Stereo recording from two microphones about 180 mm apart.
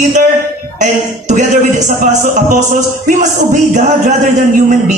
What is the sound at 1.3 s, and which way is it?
A man's voice, 45° right (ahead or behind).